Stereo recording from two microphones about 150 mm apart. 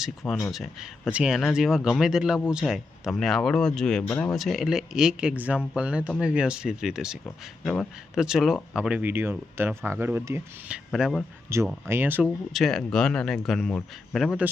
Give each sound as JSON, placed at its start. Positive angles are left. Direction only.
{"t": 0.0, "sound": "speech", "side_deg": 0}
{"t": 10.9, "sound": "speech", "side_deg": 0}
{"t": 11.5, "sound": "speech", "side_deg": -20}
{"t": 12.5, "sound": "speech", "side_deg": 0}